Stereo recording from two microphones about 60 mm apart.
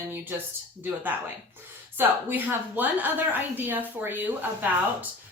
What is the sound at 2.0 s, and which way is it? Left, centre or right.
A woman's voice, right.